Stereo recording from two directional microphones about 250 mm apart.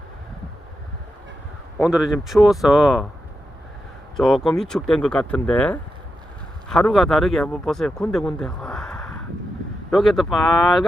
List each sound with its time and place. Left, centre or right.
1.8 s speech: centre
4.2 s speech: centre